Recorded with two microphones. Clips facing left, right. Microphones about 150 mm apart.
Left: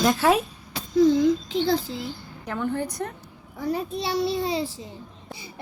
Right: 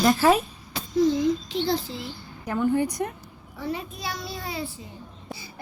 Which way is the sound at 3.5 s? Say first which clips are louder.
Left 4 dB; 40° left (ahead or behind).